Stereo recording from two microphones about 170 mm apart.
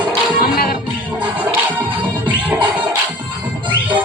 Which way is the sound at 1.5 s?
10° right (ahead or behind).